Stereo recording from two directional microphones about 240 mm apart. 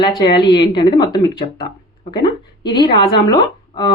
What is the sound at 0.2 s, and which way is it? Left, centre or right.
Speech, centre.